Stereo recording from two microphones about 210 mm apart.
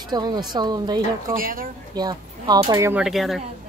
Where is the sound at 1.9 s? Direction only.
20° right (ahead or behind); by 3.4 s centre (ahead or behind).